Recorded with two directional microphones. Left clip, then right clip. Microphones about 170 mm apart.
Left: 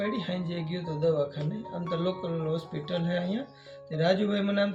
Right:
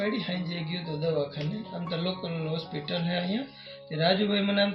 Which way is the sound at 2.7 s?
25° left (ahead or behind).